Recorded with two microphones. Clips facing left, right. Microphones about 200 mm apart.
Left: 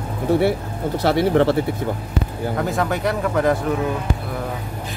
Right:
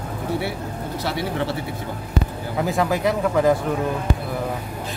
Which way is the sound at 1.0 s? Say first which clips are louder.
Left 10 dB; 55° left (ahead or behind).